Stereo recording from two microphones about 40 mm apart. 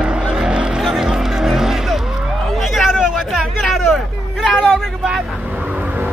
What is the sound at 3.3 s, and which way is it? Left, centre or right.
Hubbub, centre.